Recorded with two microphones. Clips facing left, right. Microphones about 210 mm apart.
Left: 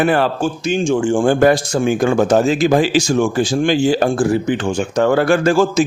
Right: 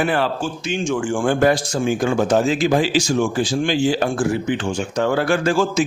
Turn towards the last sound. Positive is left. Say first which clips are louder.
# left 4 dB
turn(degrees=45)  # may be behind; listen again after turning